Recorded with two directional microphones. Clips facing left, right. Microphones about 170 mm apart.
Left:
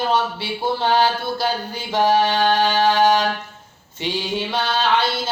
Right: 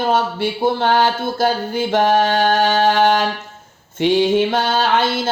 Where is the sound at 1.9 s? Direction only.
50° right (ahead or behind).